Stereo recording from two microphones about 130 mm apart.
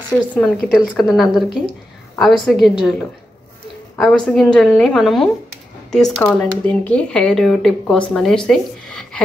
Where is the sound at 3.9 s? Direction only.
5° left (ahead or behind).